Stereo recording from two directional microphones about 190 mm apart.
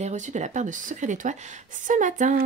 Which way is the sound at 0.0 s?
40° right (ahead or behind).